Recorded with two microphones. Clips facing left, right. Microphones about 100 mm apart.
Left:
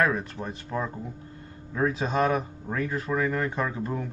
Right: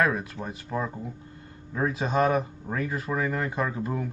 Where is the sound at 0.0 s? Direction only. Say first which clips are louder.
Even; 5° right (ahead or behind).